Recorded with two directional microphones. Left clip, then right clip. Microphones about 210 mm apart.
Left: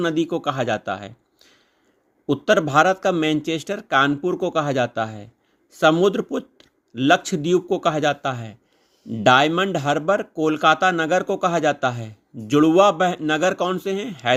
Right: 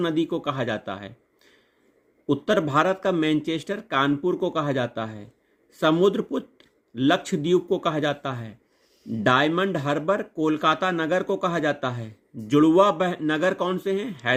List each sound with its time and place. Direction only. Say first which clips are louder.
0.0 s speech: left 3 dB; 20° left (ahead or behind)